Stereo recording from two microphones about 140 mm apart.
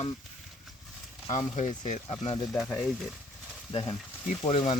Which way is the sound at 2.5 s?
Centre (ahead or behind).